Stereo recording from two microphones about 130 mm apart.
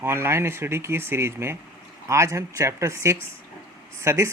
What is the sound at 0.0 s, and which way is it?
Speech, 20° right (ahead or behind).